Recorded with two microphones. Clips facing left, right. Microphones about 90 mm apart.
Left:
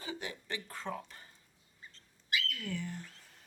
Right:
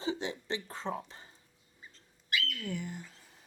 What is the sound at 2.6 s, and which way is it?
Speech, 15° right (ahead or behind).